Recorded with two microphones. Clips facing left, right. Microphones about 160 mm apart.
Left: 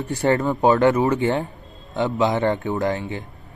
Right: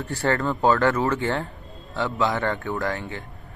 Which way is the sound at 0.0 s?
20° left (ahead or behind).